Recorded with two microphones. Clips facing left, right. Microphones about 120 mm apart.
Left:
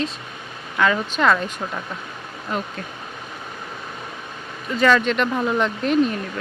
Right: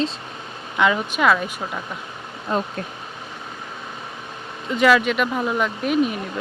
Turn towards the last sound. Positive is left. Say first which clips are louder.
# left 1 dB
turn(degrees=-10)  # may be behind; listen again after turning